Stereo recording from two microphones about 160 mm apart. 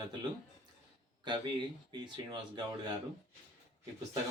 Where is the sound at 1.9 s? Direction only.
25° right (ahead or behind).